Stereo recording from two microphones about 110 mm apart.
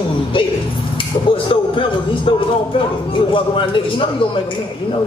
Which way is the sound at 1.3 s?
50° left (ahead or behind).